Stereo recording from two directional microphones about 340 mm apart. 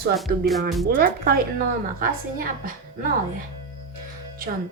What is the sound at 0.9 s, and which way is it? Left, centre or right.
A woman's voice, right.